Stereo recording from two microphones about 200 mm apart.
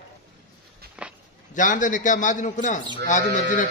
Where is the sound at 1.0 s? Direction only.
5° right (ahead or behind).